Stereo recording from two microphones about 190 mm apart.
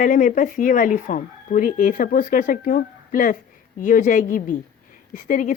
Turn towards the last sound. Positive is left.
turn(degrees=45)  # may be behind; listen again after turning